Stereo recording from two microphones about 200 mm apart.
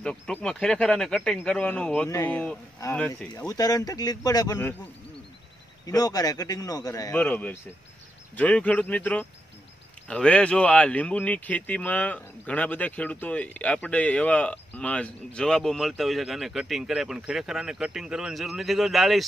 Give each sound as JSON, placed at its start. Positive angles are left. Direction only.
{"t": 0.0, "sound": "a man's voice", "side_deg": 5}
{"t": 3.3, "sound": "speech", "side_deg": 20}
{"t": 5.9, "sound": "a man's voice", "side_deg": 20}